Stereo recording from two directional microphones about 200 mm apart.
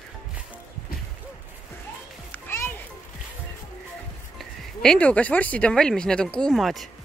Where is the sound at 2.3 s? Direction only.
10° left (ahead or behind).